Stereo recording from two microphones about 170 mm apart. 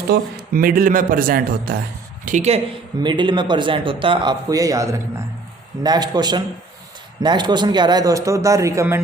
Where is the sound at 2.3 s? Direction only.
45° right (ahead or behind).